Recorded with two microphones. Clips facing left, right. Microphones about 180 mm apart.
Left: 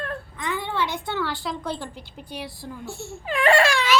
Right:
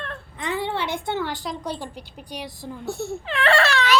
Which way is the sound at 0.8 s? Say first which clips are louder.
Right 1 dB; 55° right (ahead or behind).